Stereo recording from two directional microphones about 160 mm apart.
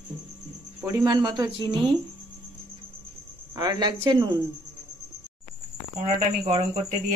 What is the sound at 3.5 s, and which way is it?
Speech, 25° right (ahead or behind).